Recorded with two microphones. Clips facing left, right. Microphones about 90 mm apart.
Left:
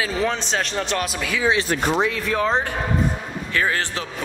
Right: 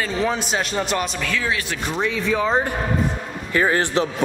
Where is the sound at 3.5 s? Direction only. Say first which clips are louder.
Right 5 dB; 20° right (ahead or behind).